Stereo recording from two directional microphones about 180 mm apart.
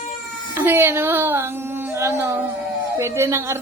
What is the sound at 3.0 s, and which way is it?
Speech, 15° right (ahead or behind).